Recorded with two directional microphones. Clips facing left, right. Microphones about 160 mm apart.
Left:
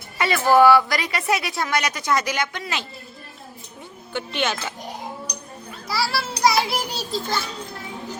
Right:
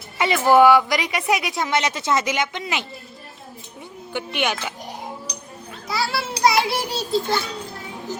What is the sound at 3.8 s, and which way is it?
Music, 15° right (ahead or behind).